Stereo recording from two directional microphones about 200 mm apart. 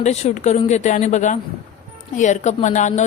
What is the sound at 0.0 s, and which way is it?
Speech, 35° left (ahead or behind).